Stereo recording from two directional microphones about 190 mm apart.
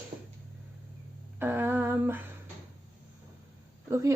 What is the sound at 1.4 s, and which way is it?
Female singing, 10° right (ahead or behind).